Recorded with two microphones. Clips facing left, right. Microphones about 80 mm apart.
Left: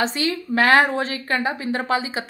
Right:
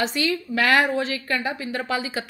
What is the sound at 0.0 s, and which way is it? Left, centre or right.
A woman's voice, left.